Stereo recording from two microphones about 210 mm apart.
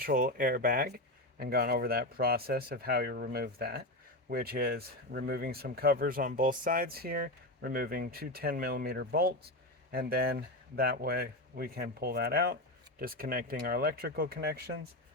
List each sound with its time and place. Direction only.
0.0 s speech: 45° right (ahead or behind)